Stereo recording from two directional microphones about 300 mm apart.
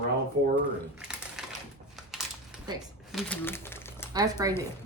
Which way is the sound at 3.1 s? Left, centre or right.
Centre.